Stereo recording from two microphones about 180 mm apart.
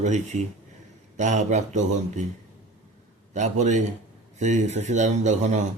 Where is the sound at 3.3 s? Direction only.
40° right (ahead or behind).